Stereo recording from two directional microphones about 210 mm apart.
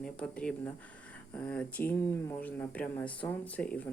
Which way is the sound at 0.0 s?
5° left (ahead or behind).